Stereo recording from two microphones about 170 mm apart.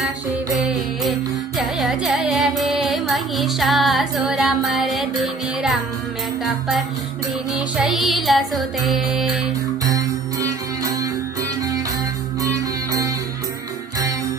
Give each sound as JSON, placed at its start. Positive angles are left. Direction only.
{"t": 0.6, "sound": "music", "side_deg": 0}
{"t": 7.5, "sound": "music", "side_deg": 0}
{"t": 9.8, "sound": "music", "side_deg": -20}
{"t": 12.4, "sound": "music", "side_deg": -20}